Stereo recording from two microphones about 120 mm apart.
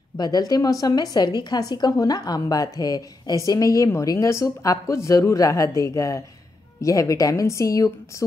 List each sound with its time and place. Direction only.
0.2 s speech: 35° left (ahead or behind)